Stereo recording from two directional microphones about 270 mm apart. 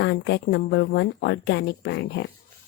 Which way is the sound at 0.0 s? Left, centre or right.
Left.